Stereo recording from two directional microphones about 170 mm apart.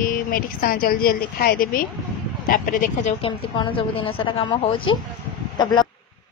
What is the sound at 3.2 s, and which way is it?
A woman's voice, 30° left (ahead or behind).